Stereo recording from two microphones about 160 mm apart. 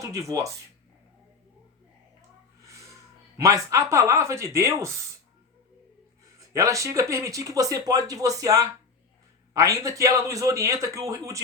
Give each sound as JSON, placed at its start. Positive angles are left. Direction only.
{"t": 0.0, "sound": "speech", "side_deg": -20}
{"t": 2.6, "sound": "a sound", "side_deg": -20}
{"t": 3.3, "sound": "speech", "side_deg": -20}
{"t": 6.5, "sound": "speech", "side_deg": -20}